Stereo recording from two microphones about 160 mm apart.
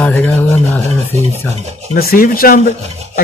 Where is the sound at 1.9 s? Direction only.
65° left (ahead or behind).